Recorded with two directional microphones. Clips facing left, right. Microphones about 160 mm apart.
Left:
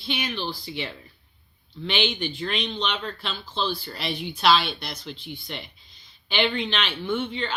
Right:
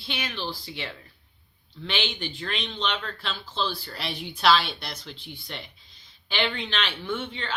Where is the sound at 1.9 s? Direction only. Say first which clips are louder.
Left 5 dB; centre (ahead or behind).